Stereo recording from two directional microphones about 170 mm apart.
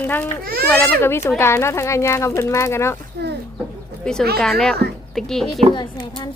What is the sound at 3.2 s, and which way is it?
Speech, 75° right (ahead or behind).